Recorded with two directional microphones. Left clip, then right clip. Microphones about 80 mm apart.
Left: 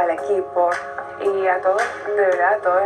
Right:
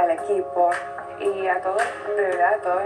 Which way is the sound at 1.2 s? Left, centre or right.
Right.